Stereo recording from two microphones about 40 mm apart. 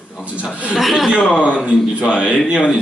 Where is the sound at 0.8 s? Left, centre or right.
Centre.